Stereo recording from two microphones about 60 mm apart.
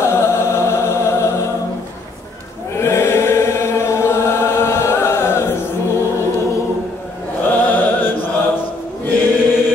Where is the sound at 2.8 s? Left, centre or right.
Left.